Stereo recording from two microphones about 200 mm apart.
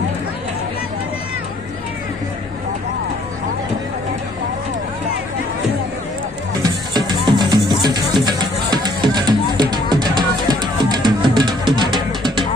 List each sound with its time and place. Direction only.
6.6 s music: 20° right (ahead or behind)